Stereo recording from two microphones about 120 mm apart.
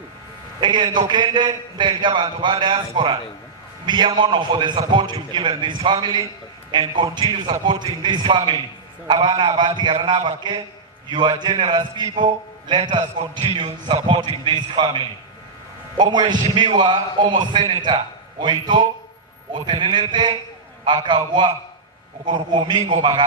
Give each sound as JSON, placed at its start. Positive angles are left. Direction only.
{"t": 0.6, "sound": "a man's voice", "side_deg": -40}